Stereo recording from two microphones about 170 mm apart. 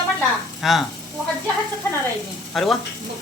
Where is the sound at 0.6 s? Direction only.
Centre (ahead or behind).